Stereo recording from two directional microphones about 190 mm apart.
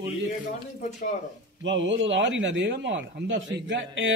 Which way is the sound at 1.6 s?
70° right (ahead or behind).